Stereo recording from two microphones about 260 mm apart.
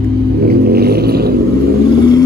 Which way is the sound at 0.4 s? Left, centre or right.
Right.